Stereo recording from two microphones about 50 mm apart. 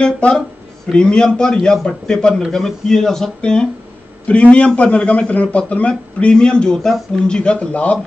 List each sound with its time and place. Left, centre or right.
0.0 s a man's voice: centre